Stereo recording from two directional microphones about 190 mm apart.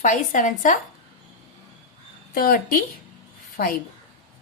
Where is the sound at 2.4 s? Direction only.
50° left (ahead or behind).